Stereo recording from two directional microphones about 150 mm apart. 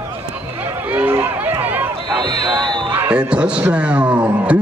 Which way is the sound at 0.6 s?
10° right (ahead or behind).